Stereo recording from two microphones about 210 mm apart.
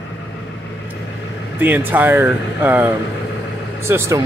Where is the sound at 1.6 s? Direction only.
10° right (ahead or behind).